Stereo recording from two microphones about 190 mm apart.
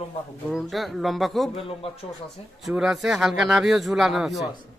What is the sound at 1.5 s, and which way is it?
Speech, 30° left (ahead or behind).